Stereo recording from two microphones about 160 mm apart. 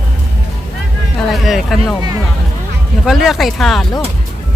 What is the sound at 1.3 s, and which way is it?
Speech, centre (ahead or behind).